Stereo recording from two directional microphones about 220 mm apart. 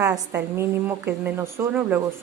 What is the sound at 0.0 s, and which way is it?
A woman's voice, 10° right (ahead or behind).